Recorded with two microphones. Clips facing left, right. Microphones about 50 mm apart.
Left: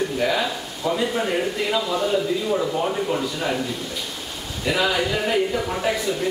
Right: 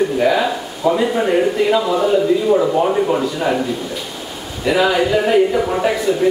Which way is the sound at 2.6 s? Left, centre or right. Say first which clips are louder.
Right 8 dB; right.